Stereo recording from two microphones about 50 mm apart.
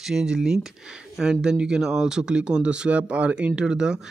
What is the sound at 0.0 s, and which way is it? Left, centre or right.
Speech, centre.